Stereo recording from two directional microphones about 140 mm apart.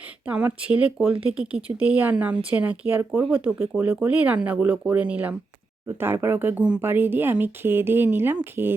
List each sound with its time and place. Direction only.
0.3 s speech: 10° right (ahead or behind)